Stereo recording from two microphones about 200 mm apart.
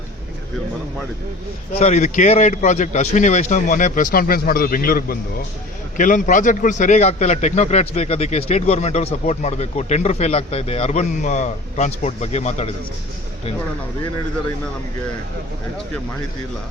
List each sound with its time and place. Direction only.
1.8 s a man's voice: 35° left (ahead or behind)